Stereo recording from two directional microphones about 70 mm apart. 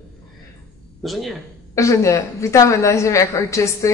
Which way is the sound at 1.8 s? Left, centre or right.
Left.